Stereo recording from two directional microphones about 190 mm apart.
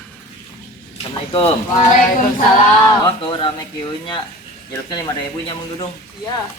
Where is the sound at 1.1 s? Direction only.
30° left (ahead or behind).